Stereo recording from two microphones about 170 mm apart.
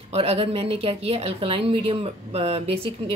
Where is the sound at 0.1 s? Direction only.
35° right (ahead or behind).